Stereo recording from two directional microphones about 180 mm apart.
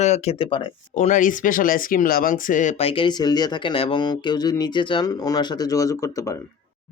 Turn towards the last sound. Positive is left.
turn(degrees=20)  # may be behind; listen again after turning